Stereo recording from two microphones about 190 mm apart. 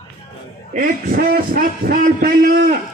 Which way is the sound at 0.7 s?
50° right (ahead or behind).